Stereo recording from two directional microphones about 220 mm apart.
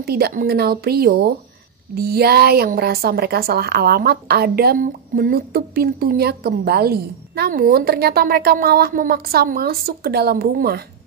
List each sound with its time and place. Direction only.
0.0 s speech: 45° right (ahead or behind)